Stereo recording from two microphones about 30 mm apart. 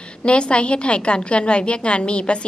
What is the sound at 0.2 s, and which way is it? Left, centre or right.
A woman's voice, left.